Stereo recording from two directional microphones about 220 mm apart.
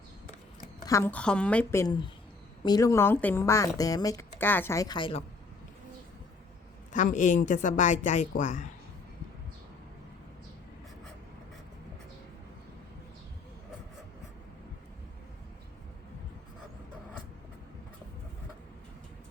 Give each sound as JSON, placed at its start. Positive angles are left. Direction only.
{"t": 0.9, "sound": "a woman's voice", "side_deg": 10}
{"t": 6.9, "sound": "a woman's voice", "side_deg": 35}